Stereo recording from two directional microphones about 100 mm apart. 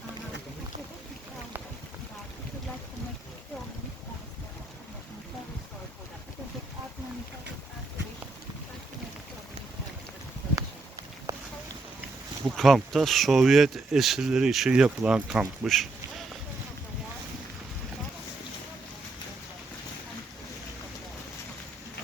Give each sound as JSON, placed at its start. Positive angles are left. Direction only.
{"t": 11.3, "sound": "a sound", "side_deg": -35}
{"t": 12.5, "sound": "speech", "side_deg": 0}
{"t": 15.6, "sound": "duck", "side_deg": 0}